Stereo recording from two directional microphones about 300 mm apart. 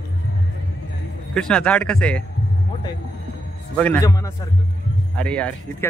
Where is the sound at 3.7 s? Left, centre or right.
Centre.